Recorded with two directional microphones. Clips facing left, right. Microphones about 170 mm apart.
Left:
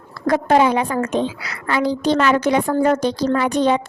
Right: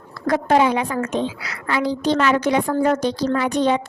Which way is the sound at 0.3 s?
45° left (ahead or behind).